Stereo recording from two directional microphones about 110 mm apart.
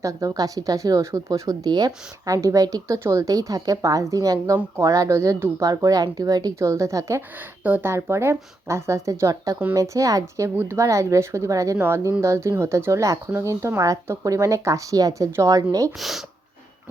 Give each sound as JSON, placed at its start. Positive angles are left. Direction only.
{"t": 0.0, "sound": "speech", "side_deg": -30}
{"t": 16.0, "sound": "speech", "side_deg": 0}